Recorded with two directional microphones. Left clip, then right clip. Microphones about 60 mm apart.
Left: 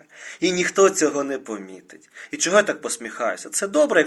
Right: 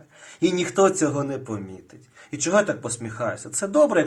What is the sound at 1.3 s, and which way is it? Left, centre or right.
Speech, centre.